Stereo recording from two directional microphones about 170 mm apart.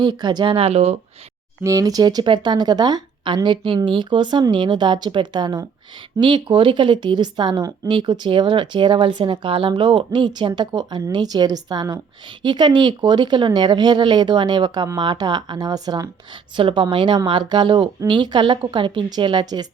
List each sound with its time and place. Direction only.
0.0 s a woman's voice: 25° right (ahead or behind)
1.6 s a woman's voice: 20° right (ahead or behind)